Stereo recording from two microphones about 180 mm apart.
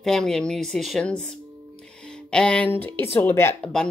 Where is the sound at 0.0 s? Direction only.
5° left (ahead or behind).